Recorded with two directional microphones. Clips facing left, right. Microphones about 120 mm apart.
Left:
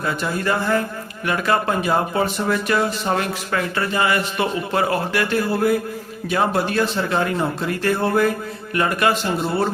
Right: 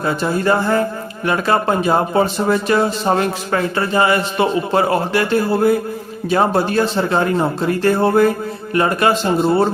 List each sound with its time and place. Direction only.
0.0 s a man's voice: 30° right (ahead or behind)